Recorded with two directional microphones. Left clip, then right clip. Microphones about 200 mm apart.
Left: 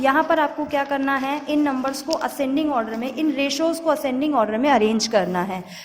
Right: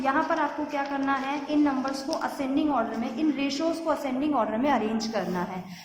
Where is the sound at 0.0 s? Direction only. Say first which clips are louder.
Left 7 dB; 45° left (ahead or behind).